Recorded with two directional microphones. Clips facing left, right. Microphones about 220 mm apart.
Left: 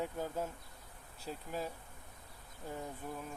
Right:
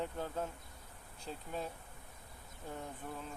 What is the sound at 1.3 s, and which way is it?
Bee, 5° left (ahead or behind).